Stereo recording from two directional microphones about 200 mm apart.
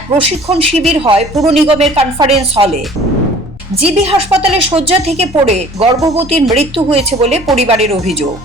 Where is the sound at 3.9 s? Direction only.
30° right (ahead or behind).